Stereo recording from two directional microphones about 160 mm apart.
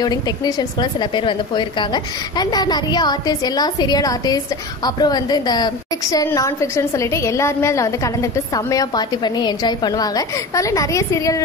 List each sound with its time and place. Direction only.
0.0 s a woman's voice: 25° left (ahead or behind)